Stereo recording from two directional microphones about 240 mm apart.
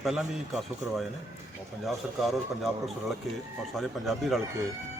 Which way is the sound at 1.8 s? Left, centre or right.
Centre.